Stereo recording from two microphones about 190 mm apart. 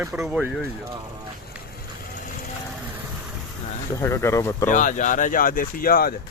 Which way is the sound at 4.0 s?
15° left (ahead or behind).